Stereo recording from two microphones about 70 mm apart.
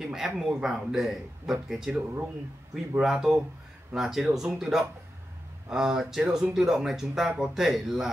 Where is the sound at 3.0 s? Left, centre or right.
Centre.